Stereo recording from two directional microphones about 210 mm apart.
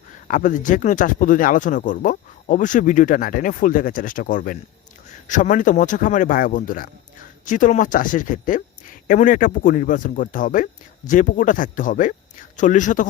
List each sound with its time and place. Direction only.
0.3 s speech: 40° left (ahead or behind)